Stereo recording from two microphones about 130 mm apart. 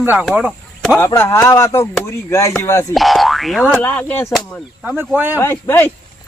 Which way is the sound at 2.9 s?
Centre (ahead or behind).